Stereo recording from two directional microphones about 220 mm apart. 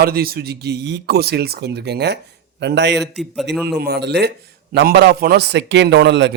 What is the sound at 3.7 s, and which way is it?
A man's voice, 45° right (ahead or behind).